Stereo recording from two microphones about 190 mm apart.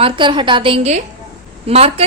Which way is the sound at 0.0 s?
25° right (ahead or behind).